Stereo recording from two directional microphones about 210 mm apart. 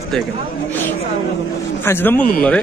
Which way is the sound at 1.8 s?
10° left (ahead or behind).